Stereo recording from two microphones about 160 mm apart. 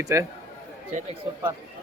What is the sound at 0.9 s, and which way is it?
Speech, 55° right (ahead or behind).